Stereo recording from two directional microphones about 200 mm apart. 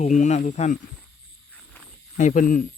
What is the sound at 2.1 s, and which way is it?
Speech, 40° left (ahead or behind).